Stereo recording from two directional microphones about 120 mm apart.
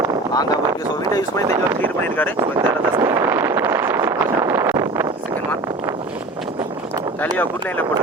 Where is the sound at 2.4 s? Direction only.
35° right (ahead or behind).